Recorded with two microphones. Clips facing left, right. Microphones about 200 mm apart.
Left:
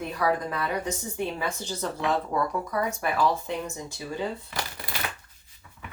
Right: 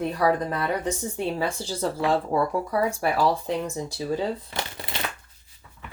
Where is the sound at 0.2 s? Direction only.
35° right (ahead or behind).